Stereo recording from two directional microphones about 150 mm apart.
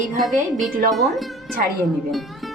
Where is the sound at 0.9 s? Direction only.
Centre (ahead or behind).